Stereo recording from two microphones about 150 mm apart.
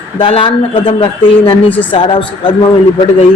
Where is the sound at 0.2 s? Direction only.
35° left (ahead or behind).